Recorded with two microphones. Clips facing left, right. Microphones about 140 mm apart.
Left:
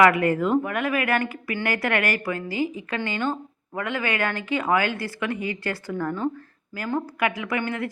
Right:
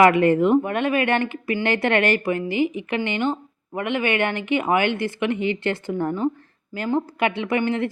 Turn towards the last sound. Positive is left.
turn(degrees=-25)  # may be behind; listen again after turning